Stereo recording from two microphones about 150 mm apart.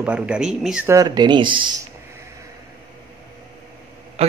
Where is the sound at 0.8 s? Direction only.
25° right (ahead or behind).